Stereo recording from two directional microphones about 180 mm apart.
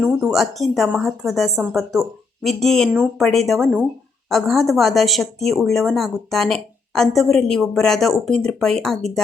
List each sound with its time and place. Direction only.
0.0 s speech: 5° right (ahead or behind)